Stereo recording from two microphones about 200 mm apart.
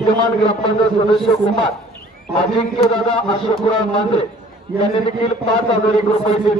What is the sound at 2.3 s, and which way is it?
A man's voice, 25° left (ahead or behind).